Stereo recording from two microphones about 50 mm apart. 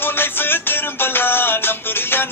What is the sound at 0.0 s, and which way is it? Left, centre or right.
Music, left.